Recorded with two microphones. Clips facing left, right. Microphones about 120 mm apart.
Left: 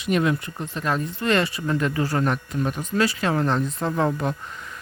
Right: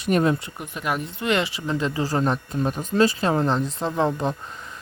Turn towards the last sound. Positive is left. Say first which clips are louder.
# right 1 dB
turn(degrees=-20)  # may be behind; listen again after turning